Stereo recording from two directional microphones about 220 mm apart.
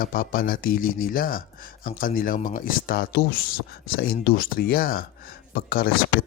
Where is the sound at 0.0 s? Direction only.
40° left (ahead or behind).